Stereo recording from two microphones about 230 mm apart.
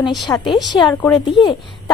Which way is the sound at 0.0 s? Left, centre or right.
Centre.